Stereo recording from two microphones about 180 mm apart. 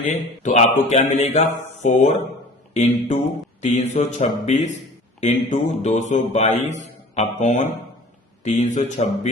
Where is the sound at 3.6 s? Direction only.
40° left (ahead or behind).